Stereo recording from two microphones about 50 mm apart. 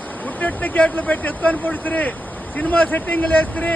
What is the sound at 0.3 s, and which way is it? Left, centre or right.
Speech, left.